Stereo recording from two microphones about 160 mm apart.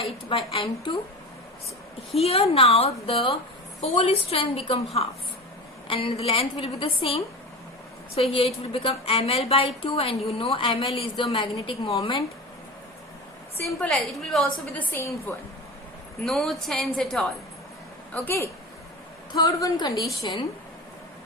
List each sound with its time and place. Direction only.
0.0 s a woman's voice: 35° left (ahead or behind)
2.1 s a woman's voice: 40° left (ahead or behind)
13.7 s a woman's voice: 5° left (ahead or behind)
16.2 s a woman's voice: centre (ahead or behind)
18.1 s a woman's voice: 15° left (ahead or behind)